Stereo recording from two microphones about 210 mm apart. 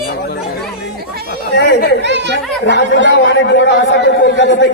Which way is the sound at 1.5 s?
55° left (ahead or behind).